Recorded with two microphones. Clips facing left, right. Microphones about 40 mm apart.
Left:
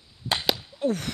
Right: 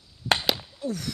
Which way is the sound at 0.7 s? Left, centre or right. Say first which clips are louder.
Left 5 dB; left.